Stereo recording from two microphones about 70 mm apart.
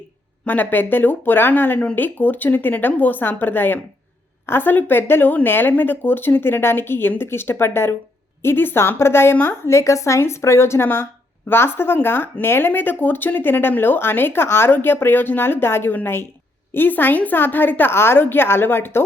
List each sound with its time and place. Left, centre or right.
0.4 s speech: left
9.6 s speech: left